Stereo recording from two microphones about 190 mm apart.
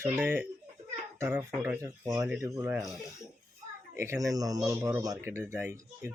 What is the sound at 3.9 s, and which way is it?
Speech, 15° right (ahead or behind).